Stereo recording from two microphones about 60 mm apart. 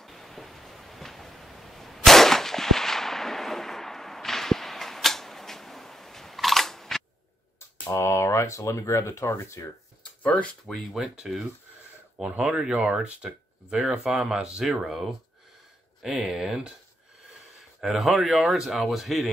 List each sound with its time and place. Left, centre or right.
0.0 s a sound: centre
7.9 s speech: left
10.2 s speech: left
11.0 s a man's voice: centre
12.2 s speech: centre
14.8 s a man's voice: centre
17.7 s a man's voice: centre